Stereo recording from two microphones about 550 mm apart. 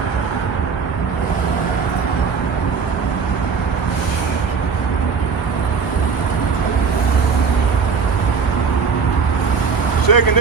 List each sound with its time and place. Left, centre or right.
10.1 s vehicle: left